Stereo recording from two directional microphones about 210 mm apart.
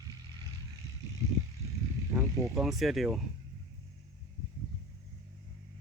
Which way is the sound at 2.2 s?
Centre (ahead or behind).